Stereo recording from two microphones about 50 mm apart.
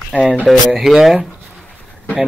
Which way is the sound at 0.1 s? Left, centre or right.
Right.